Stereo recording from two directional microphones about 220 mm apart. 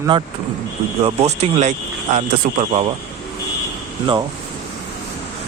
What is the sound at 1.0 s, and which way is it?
Speech, 30° right (ahead or behind).